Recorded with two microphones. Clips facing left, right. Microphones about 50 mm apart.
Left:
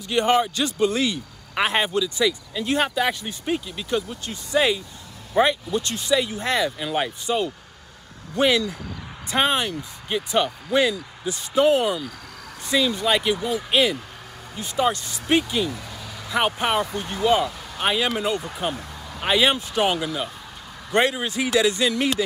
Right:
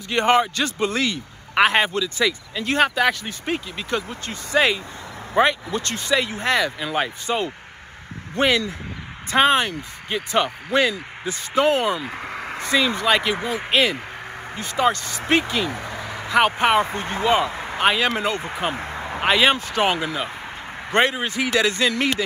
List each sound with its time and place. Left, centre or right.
0.1 s a man's voice: centre
0.7 s speech: right
2.0 s speech: centre
3.9 s speech: right
6.9 s speech: right
14.9 s speech: left
15.1 s speech: right